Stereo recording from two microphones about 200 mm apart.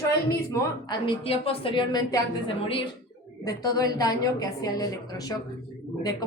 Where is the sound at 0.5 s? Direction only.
25° left (ahead or behind).